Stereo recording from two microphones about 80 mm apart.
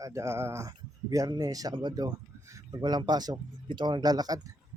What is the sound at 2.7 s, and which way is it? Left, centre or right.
Speech, right.